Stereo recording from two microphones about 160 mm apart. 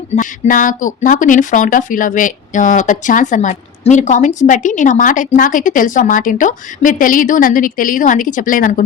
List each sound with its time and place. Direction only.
0.2 s speech: 55° left (ahead or behind)